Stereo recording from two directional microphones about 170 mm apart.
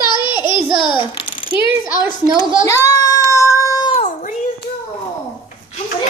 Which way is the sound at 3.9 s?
45° left (ahead or behind).